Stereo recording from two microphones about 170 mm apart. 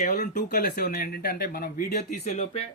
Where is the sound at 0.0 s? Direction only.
55° left (ahead or behind); by 2.6 s 40° left (ahead or behind).